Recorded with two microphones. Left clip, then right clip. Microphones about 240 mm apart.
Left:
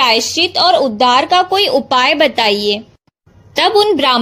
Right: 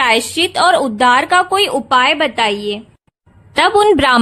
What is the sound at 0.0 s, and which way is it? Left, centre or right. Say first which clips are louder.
A woman's voice: left 1 dB; right.